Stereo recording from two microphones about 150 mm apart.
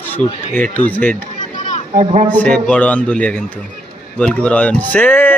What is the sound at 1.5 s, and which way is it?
Children playing, 55° left (ahead or behind).